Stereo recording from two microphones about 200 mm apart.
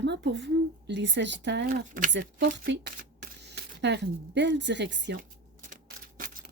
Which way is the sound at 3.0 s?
55° right (ahead or behind).